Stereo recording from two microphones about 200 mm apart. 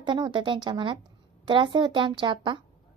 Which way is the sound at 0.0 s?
20° right (ahead or behind).